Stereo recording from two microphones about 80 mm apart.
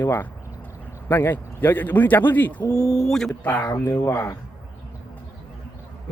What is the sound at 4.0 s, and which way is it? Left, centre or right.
Speech, left.